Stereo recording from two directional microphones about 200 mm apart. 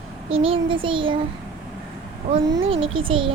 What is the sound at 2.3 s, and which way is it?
A child's voice, 25° right (ahead or behind).